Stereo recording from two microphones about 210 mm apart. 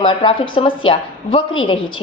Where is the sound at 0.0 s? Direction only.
25° left (ahead or behind).